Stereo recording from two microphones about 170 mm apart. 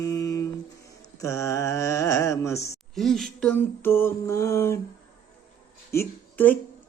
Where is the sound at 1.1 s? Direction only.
15° left (ahead or behind).